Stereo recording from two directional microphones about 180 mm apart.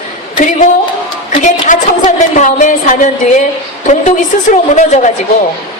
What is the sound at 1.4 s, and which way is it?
A woman's voice, 45° left (ahead or behind).